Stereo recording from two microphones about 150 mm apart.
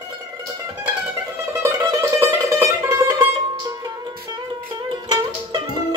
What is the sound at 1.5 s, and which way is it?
Mandolin, 20° right (ahead or behind).